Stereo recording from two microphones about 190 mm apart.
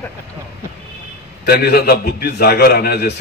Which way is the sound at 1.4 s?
55° left (ahead or behind).